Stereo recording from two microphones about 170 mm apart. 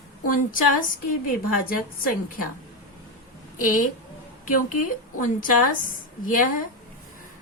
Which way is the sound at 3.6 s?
50° left (ahead or behind).